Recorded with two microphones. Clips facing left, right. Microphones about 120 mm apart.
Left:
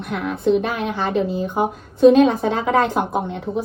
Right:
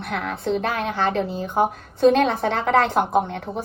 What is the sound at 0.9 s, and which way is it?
A woman's voice, 10° left (ahead or behind).